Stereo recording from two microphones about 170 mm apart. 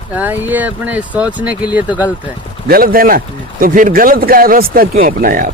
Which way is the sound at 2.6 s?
60° right (ahead or behind).